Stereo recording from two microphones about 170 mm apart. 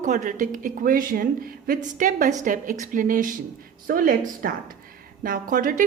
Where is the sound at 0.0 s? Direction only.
45° right (ahead or behind).